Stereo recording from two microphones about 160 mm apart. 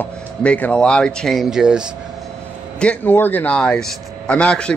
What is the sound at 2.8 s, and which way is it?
Speech, 10° left (ahead or behind).